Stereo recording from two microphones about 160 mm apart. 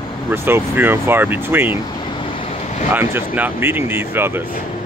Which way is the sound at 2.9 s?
15° right (ahead or behind).